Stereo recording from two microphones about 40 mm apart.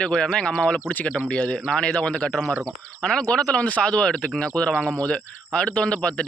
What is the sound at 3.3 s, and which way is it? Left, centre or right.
Speech, left.